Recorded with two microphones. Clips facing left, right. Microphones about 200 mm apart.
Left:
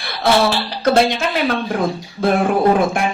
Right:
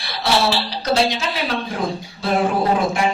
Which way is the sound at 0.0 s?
50° left (ahead or behind).